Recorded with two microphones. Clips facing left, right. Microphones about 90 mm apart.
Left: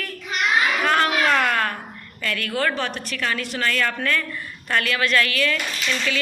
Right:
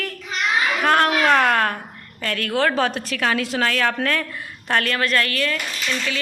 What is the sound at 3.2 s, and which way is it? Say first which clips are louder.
Speech: right 4 dB; 90° right.